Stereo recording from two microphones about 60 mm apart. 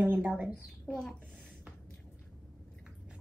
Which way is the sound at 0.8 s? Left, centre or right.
Centre.